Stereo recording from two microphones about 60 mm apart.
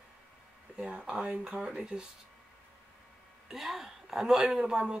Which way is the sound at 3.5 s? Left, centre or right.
Centre.